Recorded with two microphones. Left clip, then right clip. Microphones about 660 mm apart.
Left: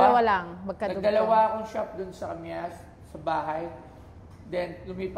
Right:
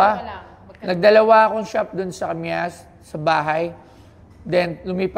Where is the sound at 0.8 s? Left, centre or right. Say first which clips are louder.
Right 11 dB; right.